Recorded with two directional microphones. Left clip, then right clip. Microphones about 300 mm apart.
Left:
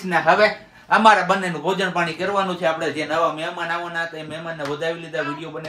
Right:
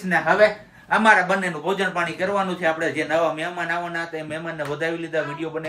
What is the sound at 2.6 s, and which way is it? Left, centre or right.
Speech, centre.